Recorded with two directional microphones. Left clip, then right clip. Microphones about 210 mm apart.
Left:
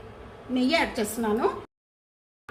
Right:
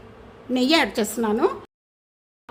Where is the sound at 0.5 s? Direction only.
55° right (ahead or behind).